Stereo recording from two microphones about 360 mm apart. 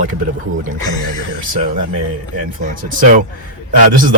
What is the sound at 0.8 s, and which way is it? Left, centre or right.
Speech, centre.